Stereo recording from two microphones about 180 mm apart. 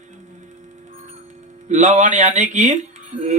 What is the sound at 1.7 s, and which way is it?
A man's voice, 40° right (ahead or behind).